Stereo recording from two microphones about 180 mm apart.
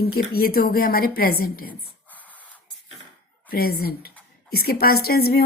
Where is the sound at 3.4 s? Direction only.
55° left (ahead or behind).